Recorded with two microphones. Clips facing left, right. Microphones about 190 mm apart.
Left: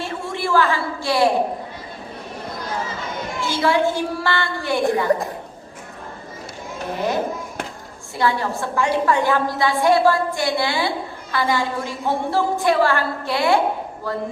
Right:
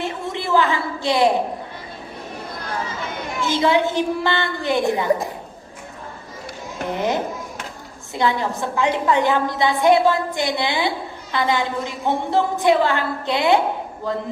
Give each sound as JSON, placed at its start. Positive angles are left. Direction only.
{"t": 0.0, "sound": "a sound", "side_deg": -20}
{"t": 3.4, "sound": "a woman's voice", "side_deg": -20}
{"t": 6.8, "sound": "a woman's voice", "side_deg": -20}